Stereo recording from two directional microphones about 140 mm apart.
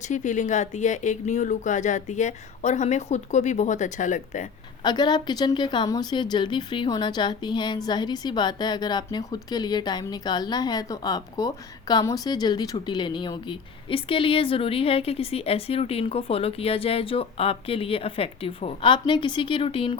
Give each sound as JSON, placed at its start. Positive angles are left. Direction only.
{"t": 0.0, "sound": "speech", "side_deg": 60}
{"t": 4.8, "sound": "a woman's voice", "side_deg": 30}